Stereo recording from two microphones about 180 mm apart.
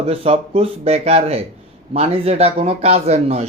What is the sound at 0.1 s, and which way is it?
Speech, 30° right (ahead or behind).